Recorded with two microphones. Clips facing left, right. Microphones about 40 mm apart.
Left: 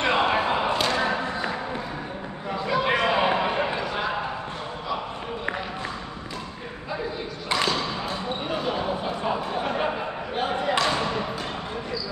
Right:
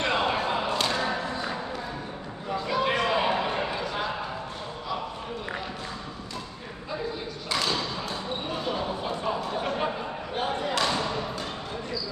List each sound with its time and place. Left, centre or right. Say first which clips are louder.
0.0 s slam: left 4 dB; left
0.9 s thump: left 3 dB; left
2.5 s a sound: left 2 dB; centre
7.4 s basketball bounce: left 4 dB; left
8.5 s basketball bounce: left 4 dB; centre
10.7 s basketball bounce: left 5 dB; left